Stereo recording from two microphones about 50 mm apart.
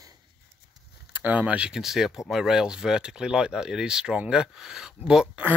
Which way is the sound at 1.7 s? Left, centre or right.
Centre.